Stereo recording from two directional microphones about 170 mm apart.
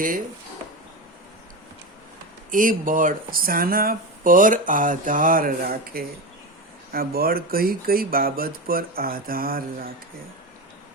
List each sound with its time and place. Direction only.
2.5 s speech: 50° right (ahead or behind)